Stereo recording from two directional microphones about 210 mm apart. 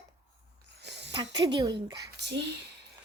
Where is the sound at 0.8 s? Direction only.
55° right (ahead or behind).